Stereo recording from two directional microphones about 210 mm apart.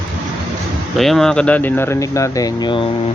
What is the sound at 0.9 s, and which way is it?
Speech, centre (ahead or behind).